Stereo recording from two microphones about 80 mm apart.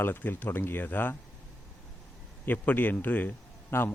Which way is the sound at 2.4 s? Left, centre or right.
Left.